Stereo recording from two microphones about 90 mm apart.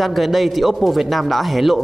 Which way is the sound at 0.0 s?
Centre (ahead or behind).